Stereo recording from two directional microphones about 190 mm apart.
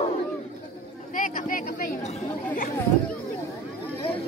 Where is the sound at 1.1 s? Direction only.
45° left (ahead or behind).